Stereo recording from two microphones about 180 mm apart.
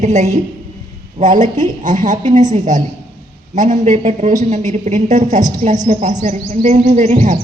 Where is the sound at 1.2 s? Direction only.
40° right (ahead or behind).